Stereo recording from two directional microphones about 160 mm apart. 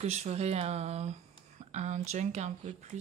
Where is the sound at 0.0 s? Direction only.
40° right (ahead or behind).